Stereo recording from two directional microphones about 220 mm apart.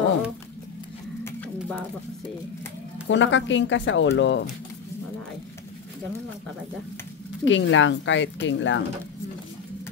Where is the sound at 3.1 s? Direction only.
55° left (ahead or behind).